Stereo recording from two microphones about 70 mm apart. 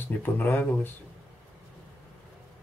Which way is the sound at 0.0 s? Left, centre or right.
Left.